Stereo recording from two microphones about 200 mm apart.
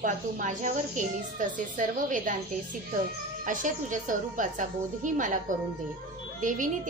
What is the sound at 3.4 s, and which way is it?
A woman's voice, 40° right (ahead or behind).